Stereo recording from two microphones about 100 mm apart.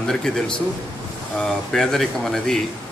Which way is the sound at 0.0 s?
5° left (ahead or behind).